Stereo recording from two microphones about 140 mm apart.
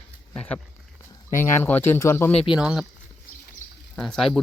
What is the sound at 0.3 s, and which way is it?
Speech, 10° left (ahead or behind).